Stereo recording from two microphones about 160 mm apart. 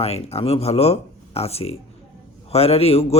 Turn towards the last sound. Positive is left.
turn(degrees=40)  # may be behind; listen again after turning